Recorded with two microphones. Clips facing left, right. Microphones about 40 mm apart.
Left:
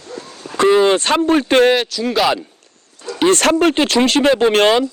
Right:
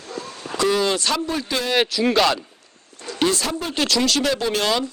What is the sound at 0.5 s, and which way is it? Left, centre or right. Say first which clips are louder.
Speech: left 8 dB; left.